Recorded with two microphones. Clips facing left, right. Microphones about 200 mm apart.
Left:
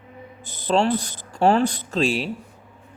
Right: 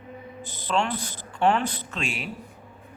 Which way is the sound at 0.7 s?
35° left (ahead or behind).